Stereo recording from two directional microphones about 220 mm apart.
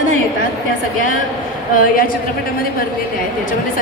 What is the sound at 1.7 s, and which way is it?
Speech, 40° left (ahead or behind).